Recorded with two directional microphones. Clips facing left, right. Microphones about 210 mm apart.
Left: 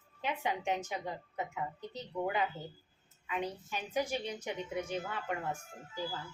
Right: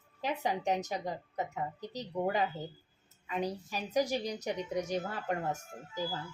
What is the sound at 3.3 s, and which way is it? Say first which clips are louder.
A woman's voice: right 2 dB; 35° right (ahead or behind).